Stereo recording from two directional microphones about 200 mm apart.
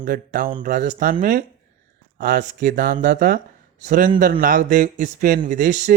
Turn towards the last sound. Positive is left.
turn(degrees=-35)  # may be behind; listen again after turning